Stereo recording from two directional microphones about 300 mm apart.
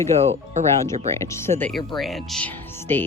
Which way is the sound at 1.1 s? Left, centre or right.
Centre.